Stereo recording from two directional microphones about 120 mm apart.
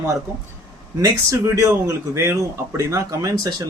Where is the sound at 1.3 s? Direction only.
25° right (ahead or behind).